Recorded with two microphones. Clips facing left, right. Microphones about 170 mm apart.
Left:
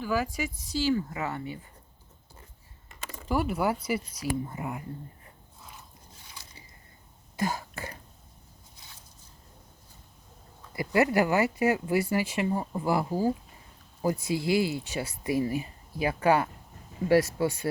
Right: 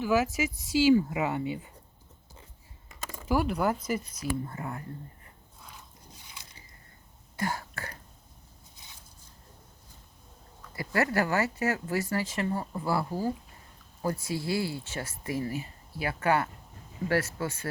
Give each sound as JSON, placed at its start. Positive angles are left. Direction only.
{"t": 0.0, "sound": "speech", "side_deg": -10}
{"t": 3.2, "sound": "speech", "side_deg": 0}
{"t": 7.3, "sound": "a sound", "side_deg": 20}
{"t": 10.8, "sound": "speech", "side_deg": 15}